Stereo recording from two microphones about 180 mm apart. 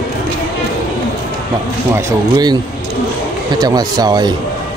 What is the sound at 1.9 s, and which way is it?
Speech, 20° right (ahead or behind).